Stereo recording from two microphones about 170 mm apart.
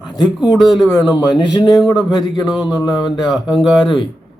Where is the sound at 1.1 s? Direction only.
25° left (ahead or behind).